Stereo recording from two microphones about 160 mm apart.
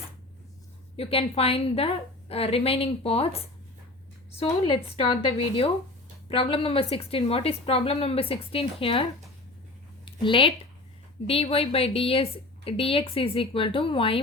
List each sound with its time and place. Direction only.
0.9 s a woman's voice: 40° left (ahead or behind)
4.4 s a woman's voice: 35° left (ahead or behind)
10.1 s a woman's voice: 30° left (ahead or behind)